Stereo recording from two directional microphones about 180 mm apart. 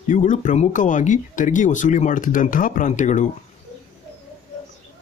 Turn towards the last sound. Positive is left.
turn(degrees=40)  # may be behind; listen again after turning